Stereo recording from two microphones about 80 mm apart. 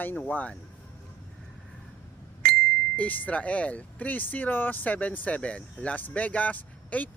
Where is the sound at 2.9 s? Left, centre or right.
Centre.